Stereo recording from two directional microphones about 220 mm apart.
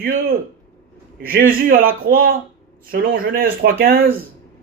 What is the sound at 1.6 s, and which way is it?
Speech, 40° right (ahead or behind).